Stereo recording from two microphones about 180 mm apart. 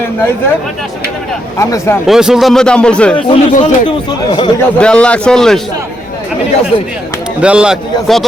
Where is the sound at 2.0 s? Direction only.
5° right (ahead or behind).